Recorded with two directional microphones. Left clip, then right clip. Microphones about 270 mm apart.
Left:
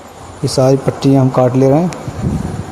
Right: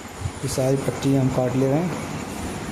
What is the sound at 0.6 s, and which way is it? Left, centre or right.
Speech, left.